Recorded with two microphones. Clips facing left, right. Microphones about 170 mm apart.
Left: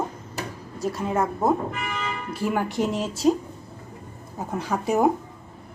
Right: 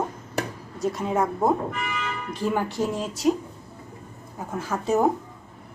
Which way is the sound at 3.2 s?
30° left (ahead or behind).